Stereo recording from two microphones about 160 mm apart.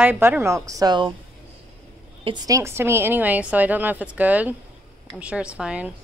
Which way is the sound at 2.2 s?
25° right (ahead or behind).